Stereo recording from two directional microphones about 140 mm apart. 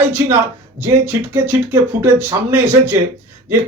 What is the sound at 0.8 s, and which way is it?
Speech, 15° right (ahead or behind).